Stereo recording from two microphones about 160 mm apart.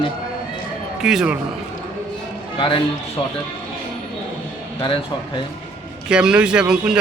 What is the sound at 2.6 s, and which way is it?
Speech, 35° left (ahead or behind).